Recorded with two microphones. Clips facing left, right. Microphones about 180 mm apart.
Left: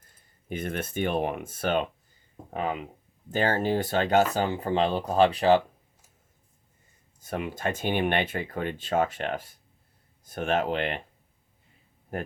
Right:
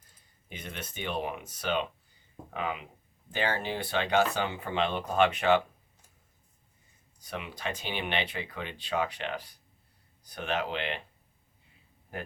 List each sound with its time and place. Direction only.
0.4 s speech: 50° left (ahead or behind)
2.5 s speech: 40° left (ahead or behind)
7.2 s speech: 45° left (ahead or behind)